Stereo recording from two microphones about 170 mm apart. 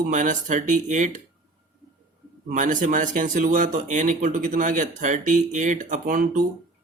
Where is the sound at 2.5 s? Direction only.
50° right (ahead or behind).